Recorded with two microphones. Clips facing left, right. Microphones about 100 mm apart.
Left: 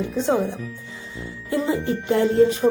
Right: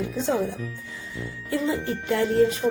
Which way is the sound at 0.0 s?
20° left (ahead or behind).